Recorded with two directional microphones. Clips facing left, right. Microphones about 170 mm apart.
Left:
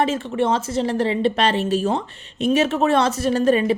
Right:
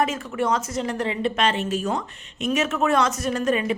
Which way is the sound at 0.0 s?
30° left (ahead or behind).